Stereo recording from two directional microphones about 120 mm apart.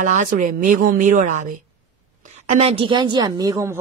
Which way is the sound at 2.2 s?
80° right.